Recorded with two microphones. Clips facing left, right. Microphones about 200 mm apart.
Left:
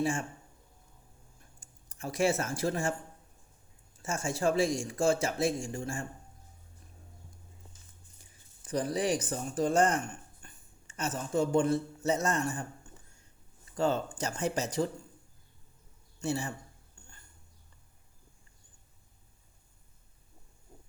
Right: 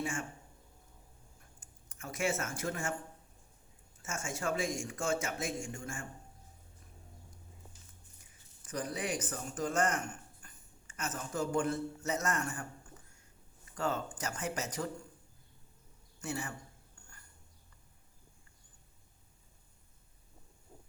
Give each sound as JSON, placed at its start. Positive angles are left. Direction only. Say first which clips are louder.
{"t": 0.0, "sound": "speech", "louder": "left 7 dB", "side_deg": 30}
{"t": 1.9, "sound": "speech", "louder": "left 6 dB", "side_deg": 35}
{"t": 4.0, "sound": "speech", "louder": "left 7 dB", "side_deg": 30}
{"t": 8.6, "sound": "speech", "louder": "left 7 dB", "side_deg": 30}
{"t": 13.7, "sound": "speech", "louder": "left 6 dB", "side_deg": 30}
{"t": 16.2, "sound": "speech", "louder": "left 6 dB", "side_deg": 30}